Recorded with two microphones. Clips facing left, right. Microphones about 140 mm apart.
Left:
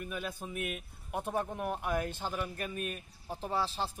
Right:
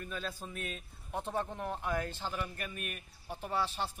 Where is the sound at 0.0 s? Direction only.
15° left (ahead or behind).